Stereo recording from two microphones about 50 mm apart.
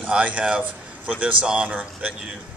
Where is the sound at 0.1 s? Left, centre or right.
Right.